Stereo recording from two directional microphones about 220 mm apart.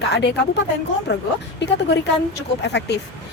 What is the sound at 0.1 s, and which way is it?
Speech, 50° left (ahead or behind).